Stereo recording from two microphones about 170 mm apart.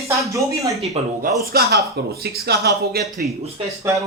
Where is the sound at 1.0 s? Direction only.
40° right (ahead or behind).